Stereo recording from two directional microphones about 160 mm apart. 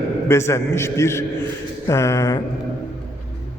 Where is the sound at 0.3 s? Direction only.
15° left (ahead or behind).